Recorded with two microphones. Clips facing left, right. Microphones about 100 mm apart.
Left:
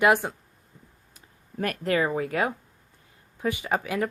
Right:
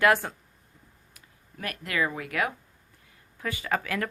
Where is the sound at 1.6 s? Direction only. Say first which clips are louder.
Left 5 dB; 40° left (ahead or behind).